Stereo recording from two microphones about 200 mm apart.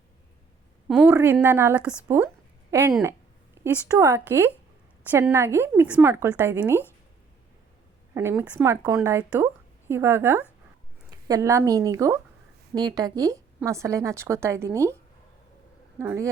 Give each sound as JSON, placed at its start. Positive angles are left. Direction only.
{"t": 0.9, "sound": "speech", "side_deg": -5}
{"t": 2.0, "sound": "a sound", "side_deg": -10}
{"t": 3.0, "sound": "speech", "side_deg": -15}
{"t": 8.1, "sound": "a woman's voice", "side_deg": -10}
{"t": 16.0, "sound": "speech", "side_deg": -15}